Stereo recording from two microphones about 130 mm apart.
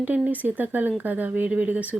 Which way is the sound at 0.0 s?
10° right (ahead or behind).